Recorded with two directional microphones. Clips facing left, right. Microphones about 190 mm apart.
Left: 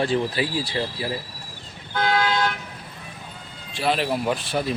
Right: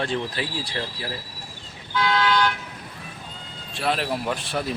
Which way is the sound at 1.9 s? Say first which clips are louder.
Even; 50° left (ahead or behind).